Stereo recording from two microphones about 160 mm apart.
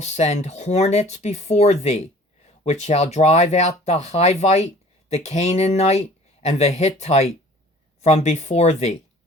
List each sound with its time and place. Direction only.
0.0 s speech: 45° left (ahead or behind)